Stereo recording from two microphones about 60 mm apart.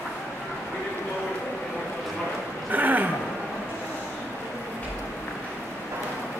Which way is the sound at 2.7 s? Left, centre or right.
Right.